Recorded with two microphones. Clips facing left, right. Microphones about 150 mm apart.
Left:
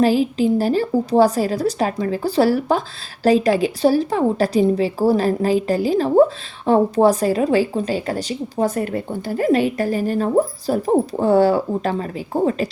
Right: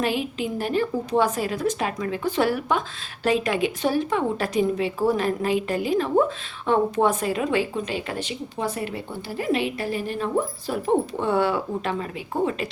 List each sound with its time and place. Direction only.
0.0 s a woman's voice: 35° left (ahead or behind)